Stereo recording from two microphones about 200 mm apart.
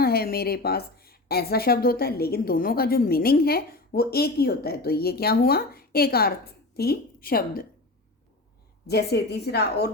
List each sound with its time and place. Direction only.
0.0 s a woman's voice: 50° left (ahead or behind)
8.9 s a woman's voice: 55° left (ahead or behind)